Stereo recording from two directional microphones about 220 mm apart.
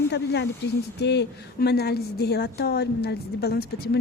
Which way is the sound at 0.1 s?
50° left (ahead or behind).